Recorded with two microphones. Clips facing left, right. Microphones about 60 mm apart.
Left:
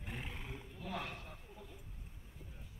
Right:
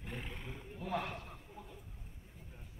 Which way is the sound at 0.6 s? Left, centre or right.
Right.